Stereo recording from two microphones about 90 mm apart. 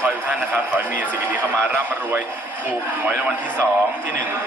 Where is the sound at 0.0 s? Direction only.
15° right (ahead or behind).